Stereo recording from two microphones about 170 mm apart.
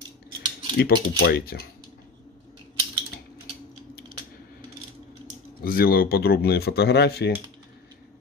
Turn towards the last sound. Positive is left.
turn(degrees=70)  # may be behind; listen again after turning